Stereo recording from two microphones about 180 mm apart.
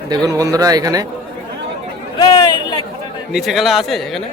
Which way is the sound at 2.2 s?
20° left (ahead or behind).